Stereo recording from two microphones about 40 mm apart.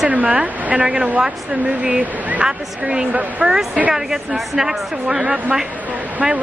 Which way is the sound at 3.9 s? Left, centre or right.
Centre.